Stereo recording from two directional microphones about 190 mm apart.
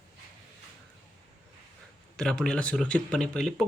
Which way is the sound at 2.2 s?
5° left (ahead or behind).